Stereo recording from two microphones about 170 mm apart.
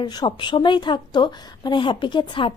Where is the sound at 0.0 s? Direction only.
25° left (ahead or behind).